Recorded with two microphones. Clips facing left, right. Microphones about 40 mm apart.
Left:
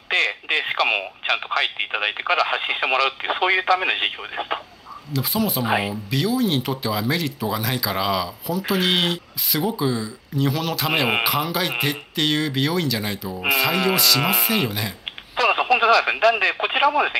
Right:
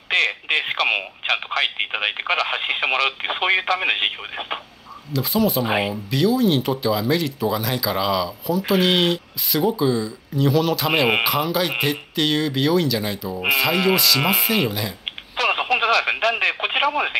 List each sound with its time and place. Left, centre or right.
0.1 s radio: right
0.8 s speech: right
2.3 s speech: left
2.8 s speech: right
5.1 s speech: centre
5.7 s speech: centre
6.0 s speech: centre
15.7 s radio: right
16.1 s speech: right